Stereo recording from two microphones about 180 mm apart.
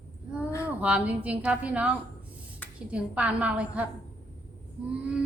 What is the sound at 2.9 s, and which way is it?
Speech, 5° right (ahead or behind).